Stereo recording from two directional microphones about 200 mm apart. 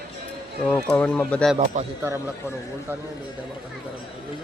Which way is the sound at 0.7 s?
5° left (ahead or behind).